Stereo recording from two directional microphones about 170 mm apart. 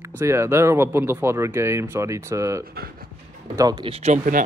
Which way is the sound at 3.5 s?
20° right (ahead or behind).